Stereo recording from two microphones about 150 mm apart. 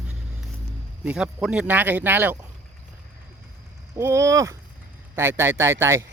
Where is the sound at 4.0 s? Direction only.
20° right (ahead or behind).